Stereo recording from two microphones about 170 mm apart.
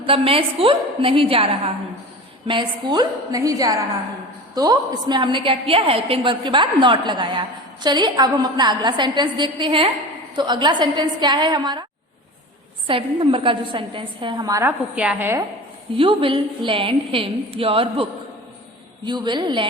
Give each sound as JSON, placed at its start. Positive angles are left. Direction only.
{"t": 0.0, "sound": "a woman's voice", "side_deg": -30}
{"t": 12.9, "sound": "a woman's voice", "side_deg": -30}
{"t": 16.0, "sound": "a woman's voice", "side_deg": -30}
{"t": 19.0, "sound": "a woman's voice", "side_deg": -25}